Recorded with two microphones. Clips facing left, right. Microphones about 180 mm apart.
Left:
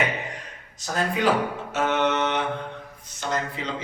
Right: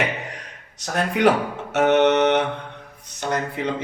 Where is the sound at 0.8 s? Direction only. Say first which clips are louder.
Right 4 dB; 65° right (ahead or behind).